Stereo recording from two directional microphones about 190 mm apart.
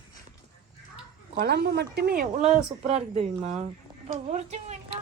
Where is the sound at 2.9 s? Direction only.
35° right (ahead or behind).